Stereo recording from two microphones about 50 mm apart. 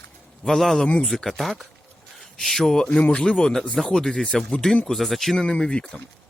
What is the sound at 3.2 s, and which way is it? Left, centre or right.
Speech, centre.